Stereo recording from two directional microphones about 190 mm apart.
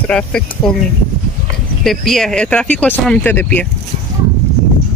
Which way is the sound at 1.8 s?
Centre (ahead or behind).